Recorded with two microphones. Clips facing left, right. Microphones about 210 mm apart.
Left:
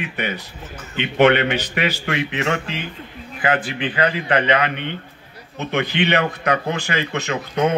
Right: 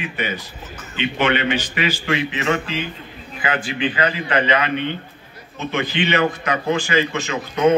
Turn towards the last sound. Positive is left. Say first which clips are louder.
# left 1 dB
turn(degrees=60)  # may be behind; listen again after turning